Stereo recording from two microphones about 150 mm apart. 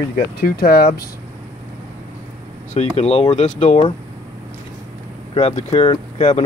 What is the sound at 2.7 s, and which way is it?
Speech, 45° left (ahead or behind).